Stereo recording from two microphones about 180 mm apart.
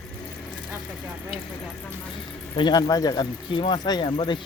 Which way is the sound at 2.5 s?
25° left (ahead or behind).